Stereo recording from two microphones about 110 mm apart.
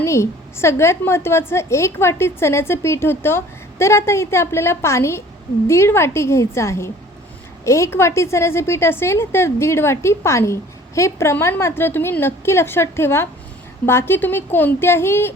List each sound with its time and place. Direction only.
0.0 s a woman's voice: 25° left (ahead or behind)